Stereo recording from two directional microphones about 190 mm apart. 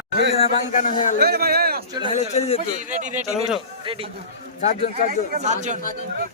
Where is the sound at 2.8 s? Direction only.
40° right (ahead or behind).